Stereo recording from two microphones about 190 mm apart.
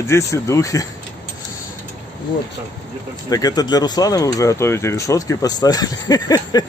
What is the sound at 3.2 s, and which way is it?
Speech, 20° left (ahead or behind).